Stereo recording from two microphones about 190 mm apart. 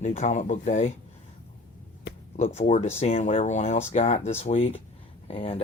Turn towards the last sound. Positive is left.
turn(degrees=30)  # may be behind; listen again after turning